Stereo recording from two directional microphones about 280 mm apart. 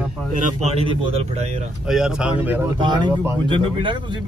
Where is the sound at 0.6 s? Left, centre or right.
Right.